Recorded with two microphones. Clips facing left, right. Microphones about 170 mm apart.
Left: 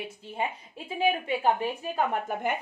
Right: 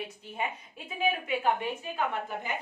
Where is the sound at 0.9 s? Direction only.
30° left (ahead or behind).